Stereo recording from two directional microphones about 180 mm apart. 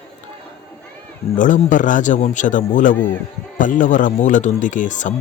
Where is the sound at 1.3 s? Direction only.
45° left (ahead or behind).